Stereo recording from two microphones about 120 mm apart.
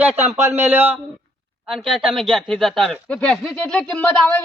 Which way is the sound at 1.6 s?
5° right (ahead or behind).